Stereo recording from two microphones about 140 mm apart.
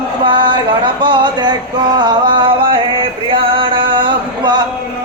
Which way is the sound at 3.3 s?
40° right (ahead or behind).